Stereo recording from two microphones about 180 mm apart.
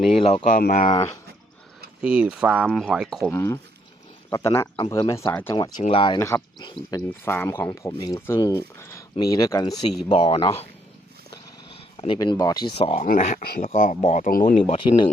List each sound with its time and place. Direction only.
0.2 s speech: 30° left (ahead or behind)
0.4 s speech: 50° left (ahead or behind)
2.0 s speech: 5° right (ahead or behind)
3.3 s speech: 15° left (ahead or behind)
5.5 s speech: 25° left (ahead or behind)
6.1 s speech: 15° left (ahead or behind)
9.7 s speech: centre (ahead or behind)
10.1 s speech: 30° left (ahead or behind)
11.7 s speech: 30° left (ahead or behind)
13.1 s speech: 45° left (ahead or behind)
14.7 s speech: 25° left (ahead or behind)